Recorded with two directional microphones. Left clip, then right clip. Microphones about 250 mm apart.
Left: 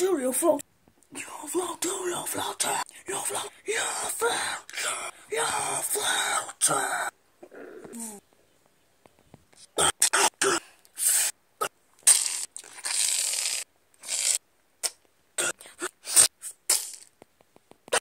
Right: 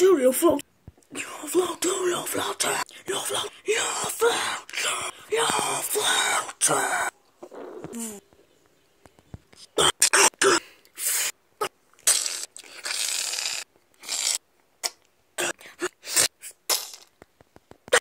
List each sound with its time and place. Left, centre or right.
0.0 s a woman's voice: centre
9.5 s throat clearing: centre
10.7 s a sound: centre